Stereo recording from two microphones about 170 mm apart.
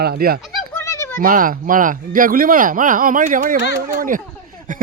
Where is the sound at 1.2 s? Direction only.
55° right (ahead or behind).